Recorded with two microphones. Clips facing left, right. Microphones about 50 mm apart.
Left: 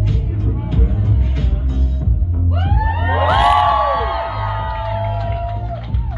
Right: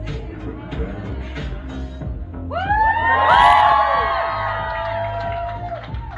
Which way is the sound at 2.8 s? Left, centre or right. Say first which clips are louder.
Right 6 dB; right.